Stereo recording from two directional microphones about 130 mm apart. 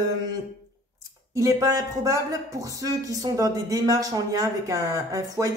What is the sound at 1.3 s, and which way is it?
Speech, 25° right (ahead or behind).